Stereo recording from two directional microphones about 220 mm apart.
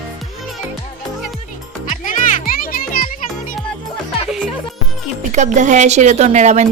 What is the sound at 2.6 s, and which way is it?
Music, 40° left (ahead or behind).